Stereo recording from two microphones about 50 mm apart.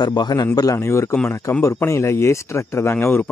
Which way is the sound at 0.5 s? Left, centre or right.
Left.